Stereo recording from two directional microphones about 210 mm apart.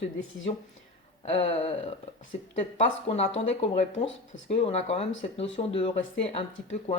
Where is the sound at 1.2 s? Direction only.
25° left (ahead or behind).